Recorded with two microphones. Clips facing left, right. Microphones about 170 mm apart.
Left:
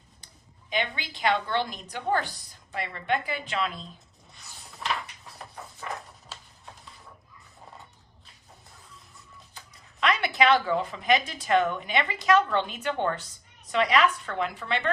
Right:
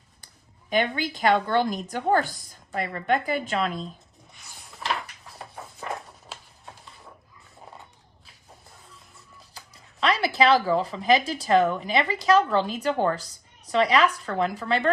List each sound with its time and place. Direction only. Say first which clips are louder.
0.7 s a woman's voice: right 6 dB; 45° right (ahead or behind)
4.7 s a sound: right 2 dB; centre (ahead or behind)
9.6 s a woman's voice: right 2 dB; 35° right (ahead or behind)